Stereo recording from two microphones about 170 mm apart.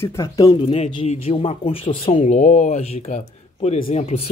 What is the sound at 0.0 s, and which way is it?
Speech, 15° left (ahead or behind).